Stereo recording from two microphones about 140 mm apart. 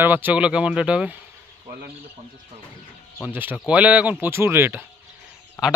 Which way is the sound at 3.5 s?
10° right (ahead or behind).